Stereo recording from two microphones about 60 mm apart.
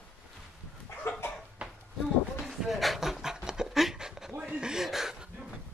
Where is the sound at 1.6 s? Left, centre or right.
Centre.